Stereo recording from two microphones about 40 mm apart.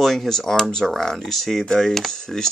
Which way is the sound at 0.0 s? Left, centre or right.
Centre.